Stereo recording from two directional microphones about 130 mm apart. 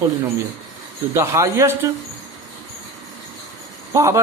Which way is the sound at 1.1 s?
20° right (ahead or behind).